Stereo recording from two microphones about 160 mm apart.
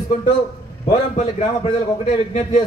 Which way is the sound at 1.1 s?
45° left (ahead or behind).